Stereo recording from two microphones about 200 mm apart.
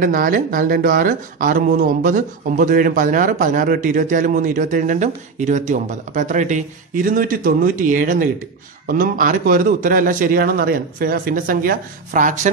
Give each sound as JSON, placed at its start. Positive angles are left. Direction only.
{"t": 0.0, "sound": "a man's voice", "side_deg": -45}